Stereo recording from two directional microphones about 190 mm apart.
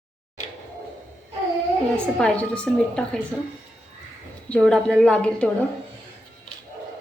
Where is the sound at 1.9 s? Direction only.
5° left (ahead or behind).